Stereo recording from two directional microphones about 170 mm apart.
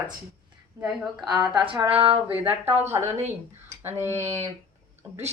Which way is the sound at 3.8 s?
15° right (ahead or behind).